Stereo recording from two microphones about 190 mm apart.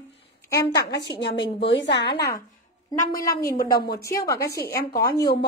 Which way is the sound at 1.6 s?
65° left (ahead or behind).